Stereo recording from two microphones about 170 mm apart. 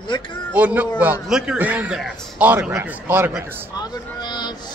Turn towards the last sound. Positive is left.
turn(degrees=25)  # may be behind; listen again after turning